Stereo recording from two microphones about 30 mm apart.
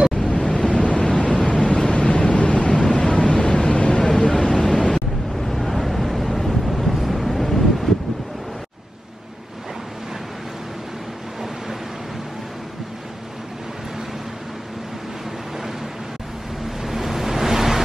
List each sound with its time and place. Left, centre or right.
0.1 s waves: centre
0.7 s waves: left
1.0 s vehicle: left
2.5 s vehicle: left
3.1 s vehicle: left
4.2 s vehicle: centre
5.4 s wind noise: centre
16.6 s waves: centre